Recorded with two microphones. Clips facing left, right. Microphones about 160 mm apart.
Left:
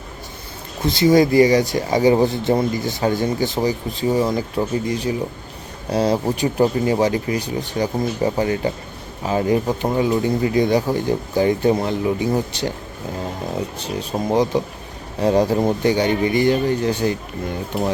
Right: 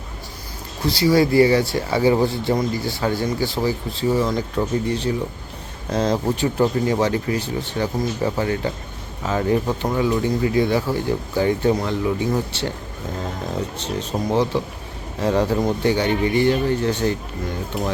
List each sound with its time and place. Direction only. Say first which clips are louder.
0.8 s speech: left 3 dB; 20° left (ahead or behind)
9.9 s speech: left 1 dB; 25° left (ahead or behind)